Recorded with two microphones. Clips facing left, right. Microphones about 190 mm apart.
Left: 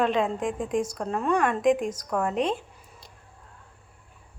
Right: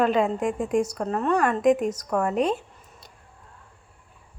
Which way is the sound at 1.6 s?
45° right (ahead or behind).